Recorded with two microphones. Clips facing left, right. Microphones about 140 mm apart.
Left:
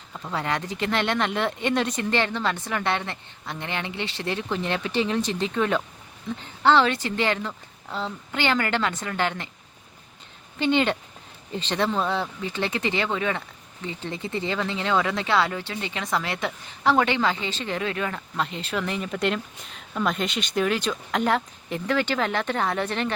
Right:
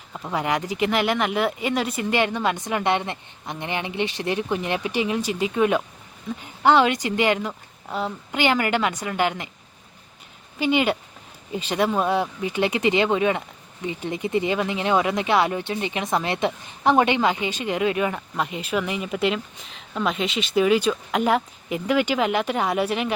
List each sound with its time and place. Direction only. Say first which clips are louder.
0.1 s speech: right 3 dB; 10° right (ahead or behind)
10.6 s speech: right 1 dB; 10° right (ahead or behind)